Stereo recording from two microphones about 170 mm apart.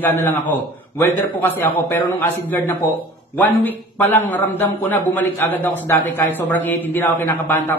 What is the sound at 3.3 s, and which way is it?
A man's voice, 10° left (ahead or behind).